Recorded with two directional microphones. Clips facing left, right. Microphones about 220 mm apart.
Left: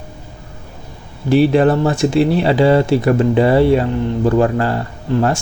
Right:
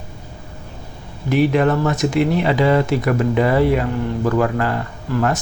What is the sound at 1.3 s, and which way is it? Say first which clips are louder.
Speech: left 4 dB; 30° left (ahead or behind).